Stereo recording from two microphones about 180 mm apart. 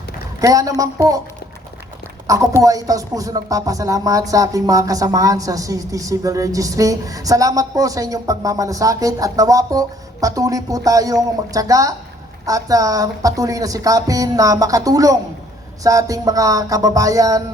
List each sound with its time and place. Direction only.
0.4 s speech: 20° right (ahead or behind)
2.2 s a woman's voice: 20° right (ahead or behind)